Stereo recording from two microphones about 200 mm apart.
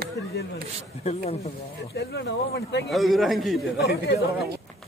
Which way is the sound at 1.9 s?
55° left (ahead or behind).